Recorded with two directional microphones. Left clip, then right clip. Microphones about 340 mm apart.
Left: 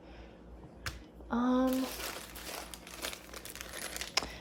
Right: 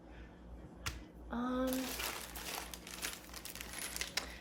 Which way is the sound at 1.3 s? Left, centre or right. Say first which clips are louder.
Left 8 dB; left.